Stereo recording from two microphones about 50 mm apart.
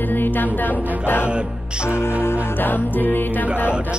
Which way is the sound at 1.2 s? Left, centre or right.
Right.